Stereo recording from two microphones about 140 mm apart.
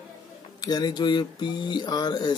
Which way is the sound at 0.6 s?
30° left (ahead or behind).